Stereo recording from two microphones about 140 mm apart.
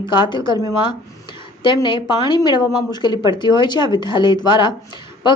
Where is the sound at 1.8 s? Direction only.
35° left (ahead or behind).